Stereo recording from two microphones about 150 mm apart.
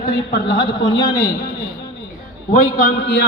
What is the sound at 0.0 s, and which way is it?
Speech, 90° left.